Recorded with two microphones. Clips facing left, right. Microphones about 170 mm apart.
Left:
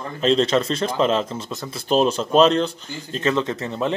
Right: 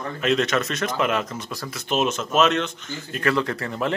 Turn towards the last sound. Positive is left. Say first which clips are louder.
# left 2 dB
turn(degrees=20)  # may be behind; listen again after turning